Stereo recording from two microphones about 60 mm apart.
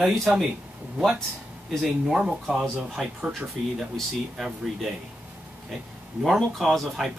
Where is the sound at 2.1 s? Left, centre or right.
Centre.